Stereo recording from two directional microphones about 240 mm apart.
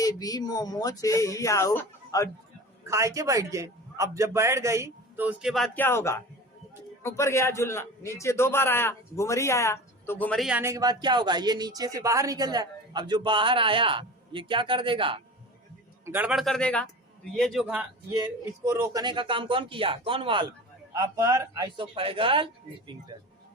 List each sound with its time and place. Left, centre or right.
0.0 s speech: centre
2.8 s a man's voice: centre
7.2 s a man's voice: centre; by 15.2 s right
16.0 s a man's voice: centre; by 22.4 s right